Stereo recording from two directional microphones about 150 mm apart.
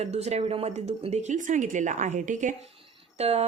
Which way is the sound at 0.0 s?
45° right (ahead or behind).